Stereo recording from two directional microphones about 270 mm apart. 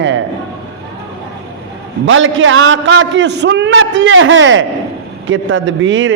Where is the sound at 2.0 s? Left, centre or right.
Right.